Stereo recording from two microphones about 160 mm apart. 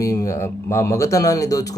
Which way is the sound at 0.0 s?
20° left (ahead or behind).